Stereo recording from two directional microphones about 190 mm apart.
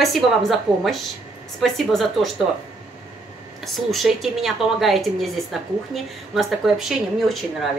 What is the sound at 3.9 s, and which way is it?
A woman's voice, centre (ahead or behind).